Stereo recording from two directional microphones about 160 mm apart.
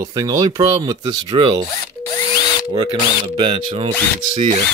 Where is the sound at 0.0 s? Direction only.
25° right (ahead or behind).